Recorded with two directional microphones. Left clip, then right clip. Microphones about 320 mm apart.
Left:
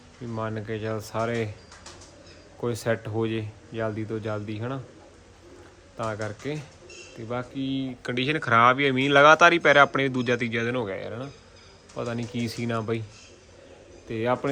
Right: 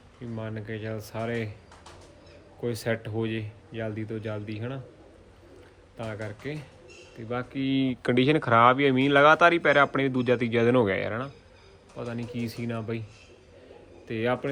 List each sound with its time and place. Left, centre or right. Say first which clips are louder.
0.3 s speech: left 6 dB; centre
2.6 s speech: left 3 dB; centre
6.0 s speech: left 5 dB; centre
7.7 s speech: right 9 dB; right
8.1 s speech: even; centre
11.9 s speech: left 4 dB; centre
14.1 s speech: left 2 dB; centre